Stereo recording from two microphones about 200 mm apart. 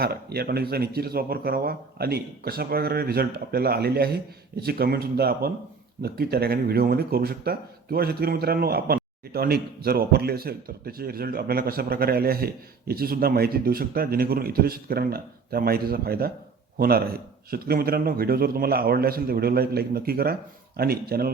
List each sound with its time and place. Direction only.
0.0 s speech: 50° right (ahead or behind)